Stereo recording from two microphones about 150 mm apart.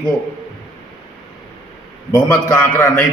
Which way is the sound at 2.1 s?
15° left (ahead or behind).